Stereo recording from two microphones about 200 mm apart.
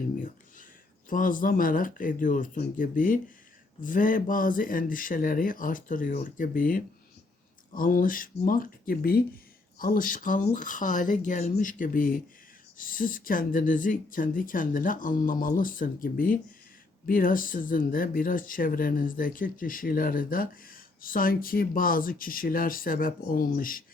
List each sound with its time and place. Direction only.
1.1 s speech: 45° left (ahead or behind)